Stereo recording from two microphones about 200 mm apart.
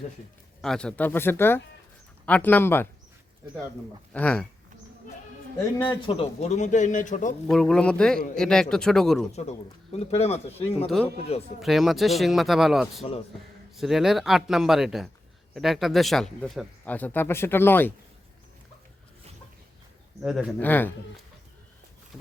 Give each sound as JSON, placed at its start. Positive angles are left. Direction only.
{"t": 0.6, "sound": "speech", "side_deg": 5}
{"t": 4.1, "sound": "speech", "side_deg": 5}
{"t": 6.1, "sound": "speech", "side_deg": 30}
{"t": 7.4, "sound": "a man's voice", "side_deg": 5}
{"t": 9.3, "sound": "speech", "side_deg": 35}
{"t": 10.8, "sound": "a man's voice", "side_deg": 0}
{"t": 20.2, "sound": "a man's voice", "side_deg": -5}
{"t": 20.6, "sound": "speech", "side_deg": 10}